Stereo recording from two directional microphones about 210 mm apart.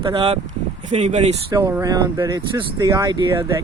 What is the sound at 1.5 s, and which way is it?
Speech, 15° right (ahead or behind).